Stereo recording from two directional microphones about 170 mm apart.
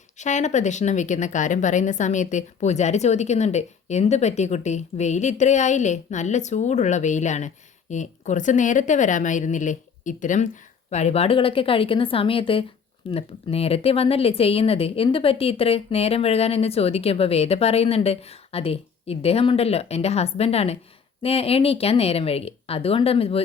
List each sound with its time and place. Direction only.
0.2 s a woman's voice: 45° left (ahead or behind)